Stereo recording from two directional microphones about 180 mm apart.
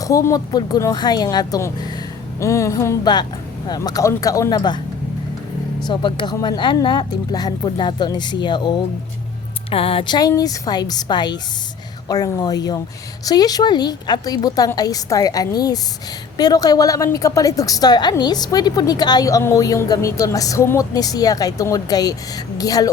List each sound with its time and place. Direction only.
0.0 s a woman's voice: 15° left (ahead or behind)
5.8 s a woman's voice: 25° left (ahead or behind)